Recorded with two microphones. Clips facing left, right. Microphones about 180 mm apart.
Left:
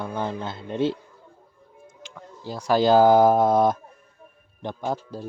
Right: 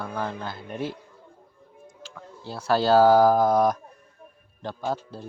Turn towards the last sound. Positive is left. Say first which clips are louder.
# left 1 dB
turn(degrees=15)  # may be behind; listen again after turning